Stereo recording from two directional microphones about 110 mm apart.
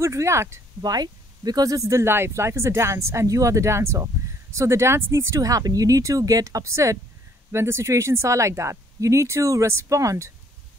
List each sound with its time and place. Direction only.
0.0 s speech: 25° right (ahead or behind)